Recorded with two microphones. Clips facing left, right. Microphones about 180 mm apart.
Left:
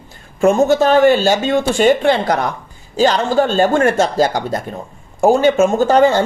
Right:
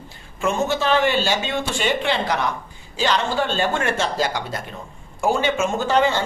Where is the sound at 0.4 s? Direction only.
45° left (ahead or behind).